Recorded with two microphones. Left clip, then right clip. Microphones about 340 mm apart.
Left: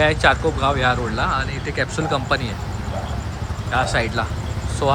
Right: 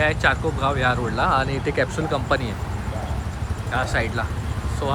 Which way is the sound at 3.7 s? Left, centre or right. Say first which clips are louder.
Left 4 dB; centre.